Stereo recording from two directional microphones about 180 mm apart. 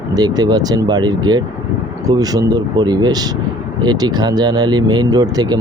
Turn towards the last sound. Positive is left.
turn(degrees=-20)  # may be behind; listen again after turning